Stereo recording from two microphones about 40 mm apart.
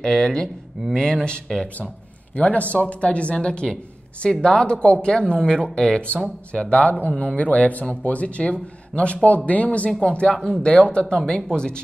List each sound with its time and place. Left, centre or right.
0.0 s speech: centre
1.2 s speech: left
2.3 s speech: left
10.3 s speech: centre
10.7 s speech: left